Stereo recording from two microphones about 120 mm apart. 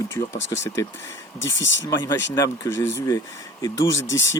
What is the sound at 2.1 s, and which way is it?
Speech, 25° left (ahead or behind).